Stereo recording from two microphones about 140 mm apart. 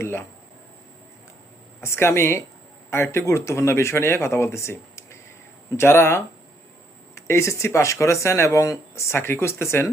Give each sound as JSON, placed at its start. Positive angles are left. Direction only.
{"t": 0.0, "sound": "speech", "side_deg": 15}
{"t": 1.8, "sound": "speech", "side_deg": 20}